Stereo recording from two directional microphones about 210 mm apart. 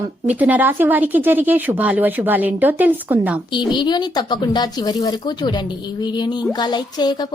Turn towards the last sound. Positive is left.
turn(degrees=20)  # may be behind; listen again after turning